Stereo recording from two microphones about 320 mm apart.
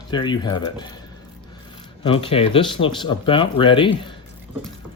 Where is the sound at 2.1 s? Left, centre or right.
Centre.